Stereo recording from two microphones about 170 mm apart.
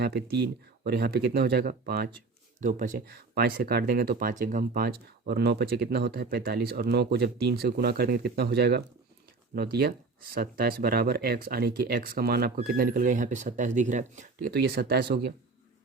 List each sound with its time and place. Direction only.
0.0 s speech: 75° right (ahead or behind)
2.1 s speech: 50° right (ahead or behind); by 8.8 s 75° right (ahead or behind)
10.3 s speech: 60° right (ahead or behind)
12.5 s speech: 55° right (ahead or behind)
14.5 s speech: 65° right (ahead or behind)